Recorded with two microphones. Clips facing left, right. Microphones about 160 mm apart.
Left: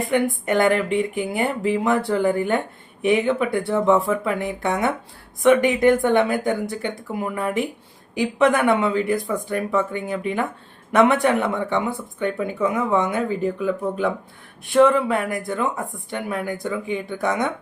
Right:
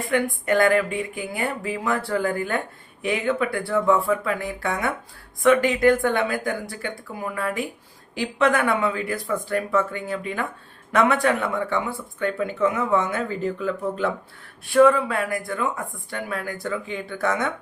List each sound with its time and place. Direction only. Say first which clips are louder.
0.0 s speech: left 3 dB; 20° left (ahead or behind)